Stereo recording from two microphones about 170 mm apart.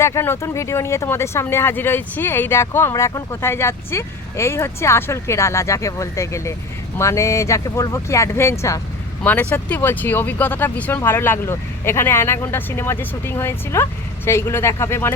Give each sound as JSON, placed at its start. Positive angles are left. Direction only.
{"t": 0.0, "sound": "speech", "side_deg": 15}